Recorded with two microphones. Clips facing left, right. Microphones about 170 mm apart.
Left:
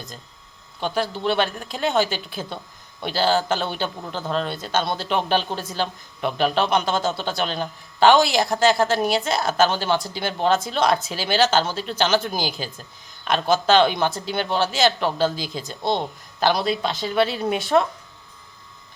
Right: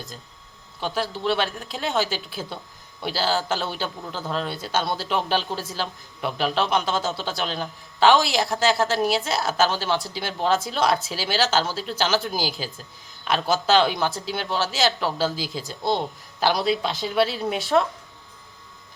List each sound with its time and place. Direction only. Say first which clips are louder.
0.8 s speech: left 2 dB; centre (ahead or behind)
15.8 s speech: left 1 dB; 20° left (ahead or behind)
16.4 s speech: left 1 dB; centre (ahead or behind)